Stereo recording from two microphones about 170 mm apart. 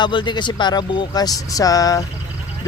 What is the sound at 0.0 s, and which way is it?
Speech, 25° left (ahead or behind).